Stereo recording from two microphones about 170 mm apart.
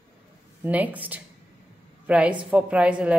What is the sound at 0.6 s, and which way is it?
A woman's voice, 10° right (ahead or behind).